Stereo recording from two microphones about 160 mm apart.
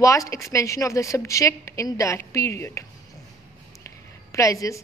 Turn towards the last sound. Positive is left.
turn(degrees=20)  # may be behind; listen again after turning